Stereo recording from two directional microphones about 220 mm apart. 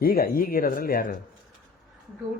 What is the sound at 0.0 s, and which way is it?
Speech, 40° left (ahead or behind).